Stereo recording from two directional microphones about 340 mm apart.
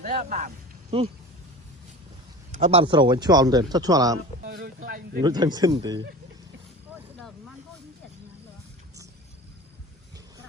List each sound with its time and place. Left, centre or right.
0.0 s speech: right
2.5 s speech: centre
4.4 s speech: right
5.2 s speech: centre
6.9 s vehicle: centre